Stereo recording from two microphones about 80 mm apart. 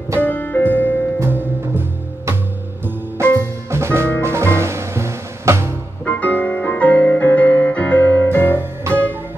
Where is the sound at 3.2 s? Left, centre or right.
Right.